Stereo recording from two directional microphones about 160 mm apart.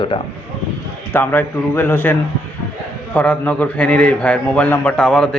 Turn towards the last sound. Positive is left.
turn(degrees=5)  # may be behind; listen again after turning